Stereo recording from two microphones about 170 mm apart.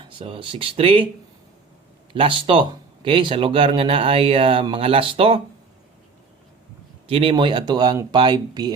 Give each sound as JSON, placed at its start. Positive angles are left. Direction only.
{"t": 0.1, "sound": "speech", "side_deg": -30}
{"t": 2.1, "sound": "speech", "side_deg": -30}
{"t": 7.1, "sound": "speech", "side_deg": -30}